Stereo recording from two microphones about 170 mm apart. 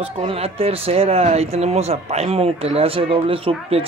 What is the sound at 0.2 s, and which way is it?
Speech, 35° right (ahead or behind).